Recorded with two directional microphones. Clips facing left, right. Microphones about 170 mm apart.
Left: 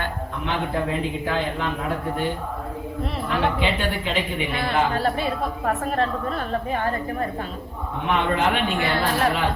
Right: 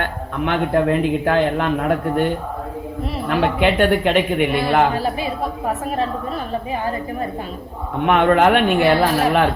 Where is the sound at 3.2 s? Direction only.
60° right (ahead or behind).